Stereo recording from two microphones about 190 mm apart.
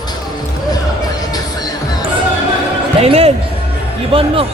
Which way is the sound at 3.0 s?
30° right (ahead or behind).